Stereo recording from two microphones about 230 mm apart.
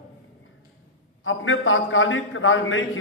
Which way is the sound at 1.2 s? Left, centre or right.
Left.